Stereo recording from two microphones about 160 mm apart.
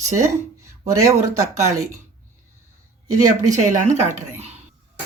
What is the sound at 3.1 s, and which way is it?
Speech, 50° right (ahead or behind).